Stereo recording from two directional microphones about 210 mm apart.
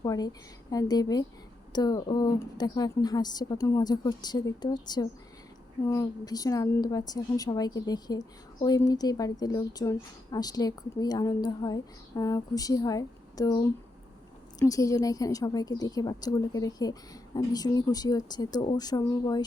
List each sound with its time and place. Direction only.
0.0 s a woman's voice: 20° left (ahead or behind)